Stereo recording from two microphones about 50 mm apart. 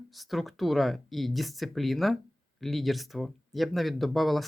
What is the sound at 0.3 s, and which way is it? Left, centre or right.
Speech, centre.